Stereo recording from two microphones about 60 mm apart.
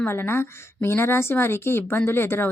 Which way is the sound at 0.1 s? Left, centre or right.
Left.